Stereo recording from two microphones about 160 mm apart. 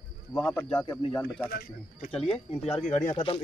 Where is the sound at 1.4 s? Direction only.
65° left (ahead or behind).